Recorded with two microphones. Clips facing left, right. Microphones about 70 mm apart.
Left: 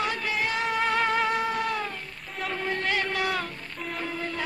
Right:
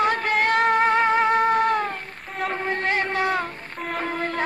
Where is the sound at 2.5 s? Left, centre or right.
Right.